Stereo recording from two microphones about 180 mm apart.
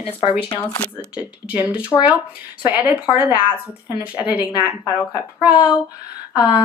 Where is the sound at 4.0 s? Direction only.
10° right (ahead or behind).